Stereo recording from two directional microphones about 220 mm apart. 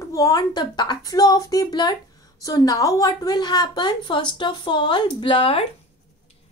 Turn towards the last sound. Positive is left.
turn(degrees=25)  # may be behind; listen again after turning